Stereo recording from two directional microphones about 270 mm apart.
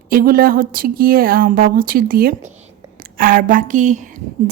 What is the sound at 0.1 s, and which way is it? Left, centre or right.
A woman's voice, right.